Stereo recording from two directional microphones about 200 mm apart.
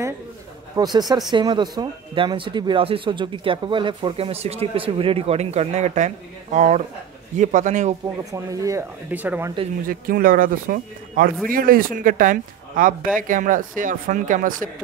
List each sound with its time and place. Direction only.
0.7 s speech: 20° right (ahead or behind); by 7.9 s 40° right (ahead or behind)
8.2 s speech: 15° right (ahead or behind)
9.8 s speech: 45° right (ahead or behind)